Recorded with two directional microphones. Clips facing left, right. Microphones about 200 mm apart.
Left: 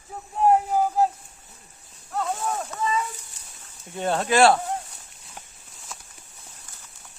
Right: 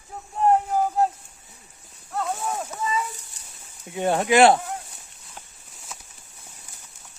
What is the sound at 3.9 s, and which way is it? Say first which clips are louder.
Speech: right 3 dB; 15° right (ahead or behind).